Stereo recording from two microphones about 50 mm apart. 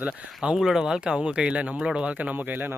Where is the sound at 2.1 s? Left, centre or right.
Right.